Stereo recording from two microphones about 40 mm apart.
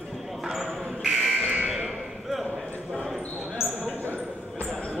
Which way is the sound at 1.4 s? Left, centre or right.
Right.